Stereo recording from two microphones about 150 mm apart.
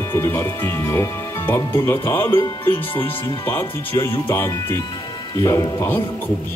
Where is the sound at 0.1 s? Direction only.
15° left (ahead or behind).